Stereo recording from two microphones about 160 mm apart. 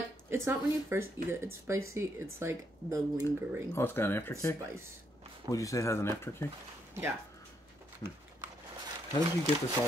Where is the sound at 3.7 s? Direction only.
15° left (ahead or behind).